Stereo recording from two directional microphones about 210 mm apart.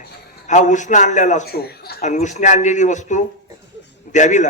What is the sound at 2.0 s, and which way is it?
A man's voice, 35° left (ahead or behind).